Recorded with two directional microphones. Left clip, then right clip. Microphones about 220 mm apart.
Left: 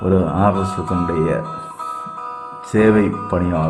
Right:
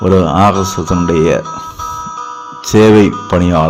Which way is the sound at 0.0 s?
15° right (ahead or behind).